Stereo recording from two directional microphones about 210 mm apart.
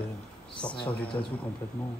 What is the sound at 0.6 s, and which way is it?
Speech, 5° left (ahead or behind).